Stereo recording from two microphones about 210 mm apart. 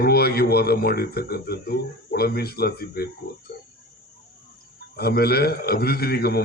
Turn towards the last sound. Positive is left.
turn(degrees=50)  # may be behind; listen again after turning